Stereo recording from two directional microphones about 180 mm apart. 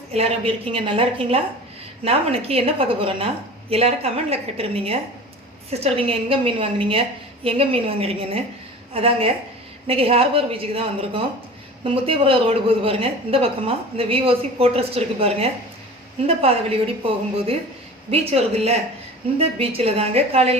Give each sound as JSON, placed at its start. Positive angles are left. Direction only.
{"t": 0.1, "sound": "a woman's voice", "side_deg": -35}